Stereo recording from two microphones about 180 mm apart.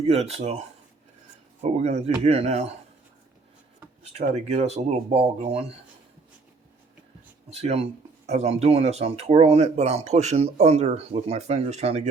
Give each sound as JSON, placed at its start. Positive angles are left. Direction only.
{"t": 0.0, "sound": "speech", "side_deg": -35}
{"t": 1.8, "sound": "speech", "side_deg": -35}
{"t": 4.0, "sound": "speech", "side_deg": -35}
{"t": 7.6, "sound": "speech", "side_deg": -35}